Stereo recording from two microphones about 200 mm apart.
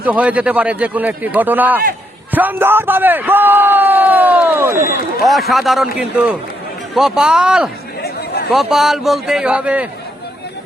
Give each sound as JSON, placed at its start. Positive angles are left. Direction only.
{"t": 0.0, "sound": "speech", "side_deg": -5}
{"t": 5.2, "sound": "a man's voice", "side_deg": 0}
{"t": 8.0, "sound": "chatter", "side_deg": 55}
{"t": 8.5, "sound": "a man's voice", "side_deg": 0}